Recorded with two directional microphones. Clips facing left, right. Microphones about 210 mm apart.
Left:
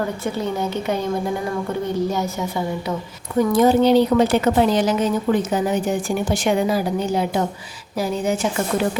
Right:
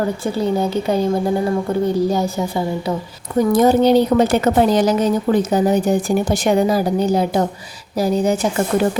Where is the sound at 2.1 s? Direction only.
35° right (ahead or behind).